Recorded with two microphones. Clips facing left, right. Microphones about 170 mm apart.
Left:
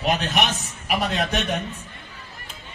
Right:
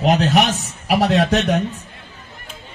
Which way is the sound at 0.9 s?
70° right (ahead or behind).